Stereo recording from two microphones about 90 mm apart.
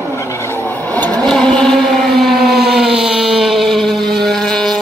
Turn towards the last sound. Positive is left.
turn(degrees=5)  # may be behind; listen again after turning